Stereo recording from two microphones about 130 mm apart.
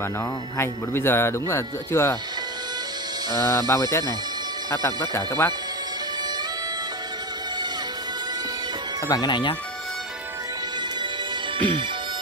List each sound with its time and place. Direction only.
0.6 s speech: 20° left (ahead or behind)
3.3 s speech: 20° left (ahead or behind)
5.1 s speech: 20° left (ahead or behind)
9.0 s speech: 30° left (ahead or behind)